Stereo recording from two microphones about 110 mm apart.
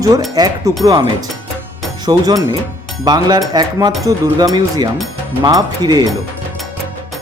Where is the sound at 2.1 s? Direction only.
35° right (ahead or behind).